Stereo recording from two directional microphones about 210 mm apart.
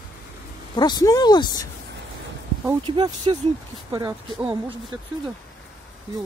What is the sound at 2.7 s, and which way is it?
Speech, 20° right (ahead or behind).